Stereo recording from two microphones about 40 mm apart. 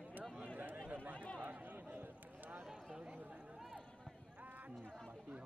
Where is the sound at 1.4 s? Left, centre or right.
Right.